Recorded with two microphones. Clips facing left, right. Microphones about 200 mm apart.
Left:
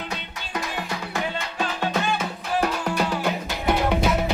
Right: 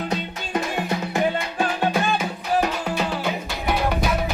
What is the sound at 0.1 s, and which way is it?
Music, 30° right (ahead or behind).